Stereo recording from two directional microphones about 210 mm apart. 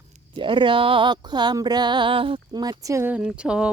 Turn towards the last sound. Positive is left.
turn(degrees=-5)  # may be behind; listen again after turning